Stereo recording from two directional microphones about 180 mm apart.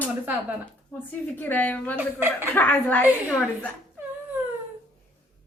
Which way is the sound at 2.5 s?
10° left (ahead or behind).